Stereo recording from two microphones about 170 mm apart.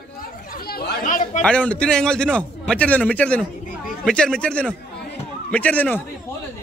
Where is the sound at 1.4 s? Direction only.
5° left (ahead or behind).